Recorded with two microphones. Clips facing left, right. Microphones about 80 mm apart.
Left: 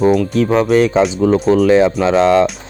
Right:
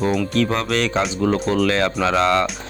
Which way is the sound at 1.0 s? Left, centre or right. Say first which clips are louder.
Left 7 dB; centre.